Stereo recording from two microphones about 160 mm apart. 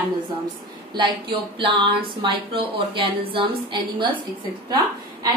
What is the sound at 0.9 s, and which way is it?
Speech, 30° right (ahead or behind).